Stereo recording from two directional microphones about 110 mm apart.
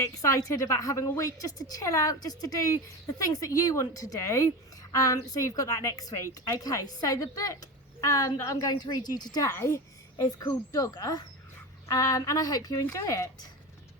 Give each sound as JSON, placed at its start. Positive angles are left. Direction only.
{"t": 0.0, "sound": "a woman's voice", "side_deg": 30}
{"t": 9.5, "sound": "a child's voice", "side_deg": 25}